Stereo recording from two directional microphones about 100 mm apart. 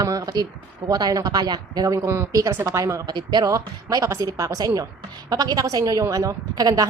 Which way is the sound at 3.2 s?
45° right (ahead or behind).